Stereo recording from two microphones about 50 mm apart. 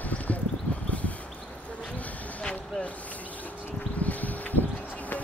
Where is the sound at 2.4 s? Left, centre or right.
Left.